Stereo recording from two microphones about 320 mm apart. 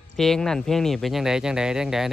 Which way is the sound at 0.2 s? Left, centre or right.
Centre.